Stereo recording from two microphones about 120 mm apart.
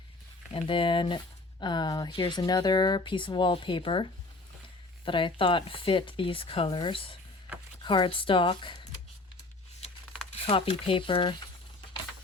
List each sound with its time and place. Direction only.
0.5 s speech: 45° left (ahead or behind)
10.4 s speech: 50° left (ahead or behind)